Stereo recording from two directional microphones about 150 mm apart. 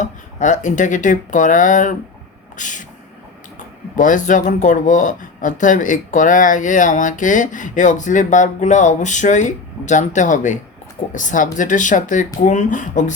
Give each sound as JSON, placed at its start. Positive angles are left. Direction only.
{"t": 0.0, "sound": "speech", "side_deg": 55}
{"t": 3.9, "sound": "speech", "side_deg": 60}